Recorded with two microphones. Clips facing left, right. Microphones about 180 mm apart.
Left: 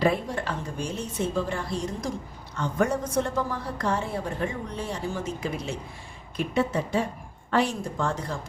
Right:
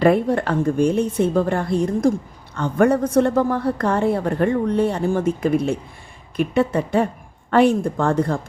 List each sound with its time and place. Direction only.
0.0 s a woman's voice: 60° right (ahead or behind)